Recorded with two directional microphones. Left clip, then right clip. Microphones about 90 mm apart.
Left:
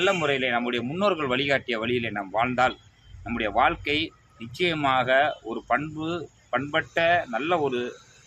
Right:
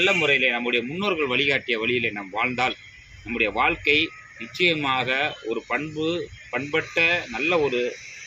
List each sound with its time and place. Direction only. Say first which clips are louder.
0.0 s a man's voice: right 4 dB; 35° left (ahead or behind)
6.0 s speech: right 5 dB; 50° left (ahead or behind)
6.7 s a man's voice: right 2 dB; 35° left (ahead or behind)